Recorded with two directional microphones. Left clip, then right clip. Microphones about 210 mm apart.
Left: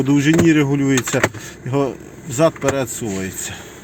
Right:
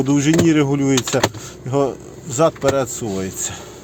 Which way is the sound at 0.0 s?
Centre (ahead or behind).